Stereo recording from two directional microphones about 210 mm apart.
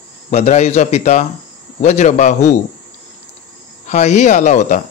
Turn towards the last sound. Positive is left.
turn(degrees=35)  # may be behind; listen again after turning